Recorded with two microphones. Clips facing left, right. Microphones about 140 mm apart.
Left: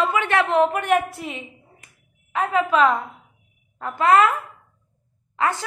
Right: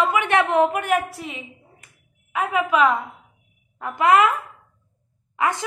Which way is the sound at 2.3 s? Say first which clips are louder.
Left 1 dB; 10° right (ahead or behind).